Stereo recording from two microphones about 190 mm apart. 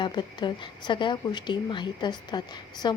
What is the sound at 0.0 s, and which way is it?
A woman's voice, 25° left (ahead or behind).